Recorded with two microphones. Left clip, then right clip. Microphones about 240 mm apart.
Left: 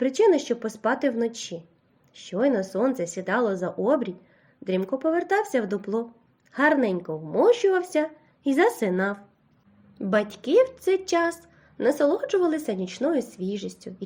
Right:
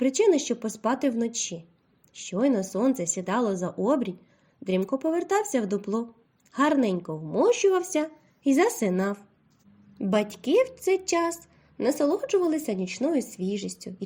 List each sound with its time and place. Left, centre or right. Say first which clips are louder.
0.0 s a woman's voice: left 2 dB; right
10.0 s speech: left 2 dB; right
13.5 s speech: even; centre